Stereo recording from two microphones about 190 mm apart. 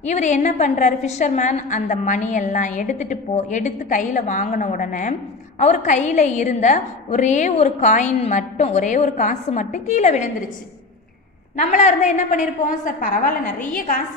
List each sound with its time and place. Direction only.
0.0 s a woman's voice: 40° left (ahead or behind)
11.5 s a woman's voice: 40° left (ahead or behind)